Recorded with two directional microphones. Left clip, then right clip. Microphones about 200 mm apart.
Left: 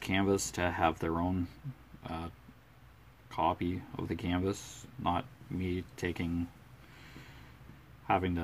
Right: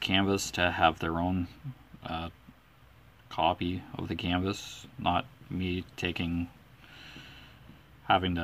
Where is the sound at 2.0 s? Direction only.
10° right (ahead or behind).